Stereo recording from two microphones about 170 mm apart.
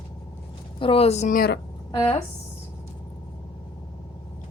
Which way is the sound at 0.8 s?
35° left (ahead or behind).